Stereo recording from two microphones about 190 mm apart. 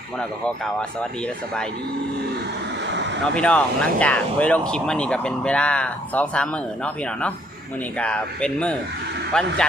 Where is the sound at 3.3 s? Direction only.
5° left (ahead or behind).